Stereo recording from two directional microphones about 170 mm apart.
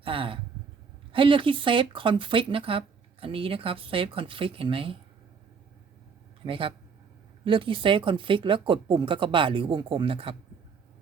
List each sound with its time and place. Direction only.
0.0 s speech: 30° right (ahead or behind)
6.4 s speech: 30° right (ahead or behind)